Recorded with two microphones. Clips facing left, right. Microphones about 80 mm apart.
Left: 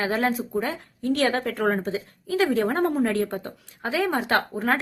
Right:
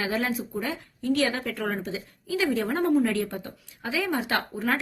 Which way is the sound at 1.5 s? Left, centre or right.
Left.